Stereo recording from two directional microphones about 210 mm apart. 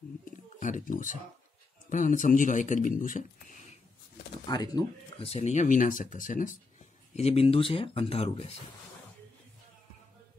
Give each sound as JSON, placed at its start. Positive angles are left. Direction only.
{"t": 0.2, "sound": "a sound", "side_deg": 35}
{"t": 1.9, "sound": "speech", "side_deg": 35}
{"t": 4.5, "sound": "speech", "side_deg": 20}
{"t": 7.2, "sound": "speech", "side_deg": 30}